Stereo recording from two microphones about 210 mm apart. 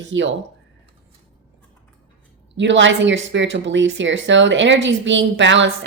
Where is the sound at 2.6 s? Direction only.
60° right (ahead or behind).